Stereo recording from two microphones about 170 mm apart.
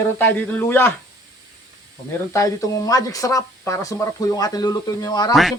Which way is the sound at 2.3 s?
20° left (ahead or behind).